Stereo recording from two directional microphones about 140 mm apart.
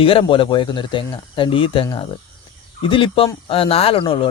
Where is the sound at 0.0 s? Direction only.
40° left (ahead or behind).